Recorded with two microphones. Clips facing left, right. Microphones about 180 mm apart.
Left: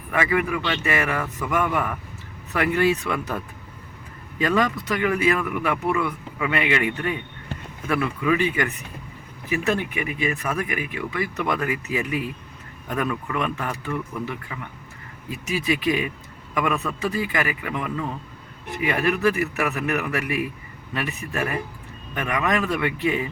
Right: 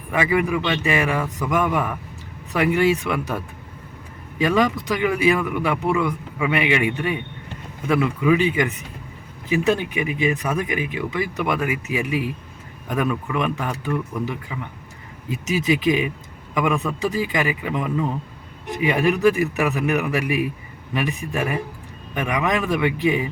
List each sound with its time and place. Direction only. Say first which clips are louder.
0.1 s speech: right 2 dB; 15° right (ahead or behind)